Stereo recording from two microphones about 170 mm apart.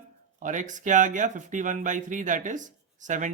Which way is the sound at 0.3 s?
50° right (ahead or behind).